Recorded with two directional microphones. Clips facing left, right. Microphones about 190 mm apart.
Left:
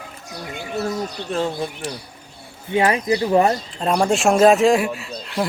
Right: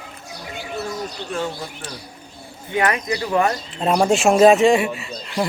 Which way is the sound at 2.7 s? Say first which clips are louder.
Left 3 dB; 30° left (ahead or behind).